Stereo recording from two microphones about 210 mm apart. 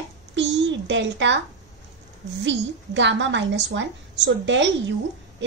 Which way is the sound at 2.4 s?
60° right (ahead or behind).